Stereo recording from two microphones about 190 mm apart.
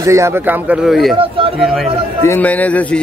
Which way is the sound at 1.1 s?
30° right (ahead or behind).